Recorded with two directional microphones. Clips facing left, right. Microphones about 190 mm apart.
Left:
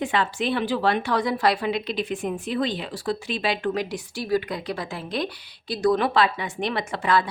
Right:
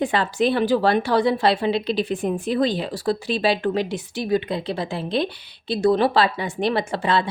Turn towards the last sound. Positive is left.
turn(degrees=-30)  # may be behind; listen again after turning